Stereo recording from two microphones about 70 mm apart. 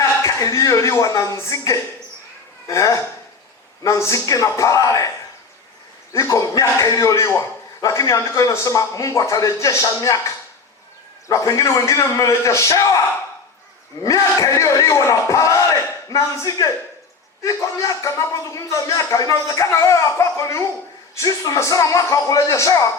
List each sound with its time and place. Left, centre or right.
0.0 s a woman's voice: left
6.1 s a man's voice: left
14.0 s a man's voice: left